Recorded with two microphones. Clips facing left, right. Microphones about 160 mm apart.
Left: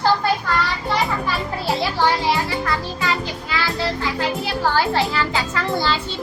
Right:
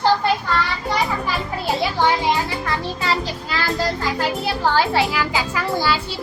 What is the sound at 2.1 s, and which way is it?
Speech, 15° right (ahead or behind).